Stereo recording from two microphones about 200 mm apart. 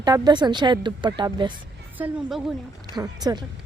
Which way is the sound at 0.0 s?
20° right (ahead or behind).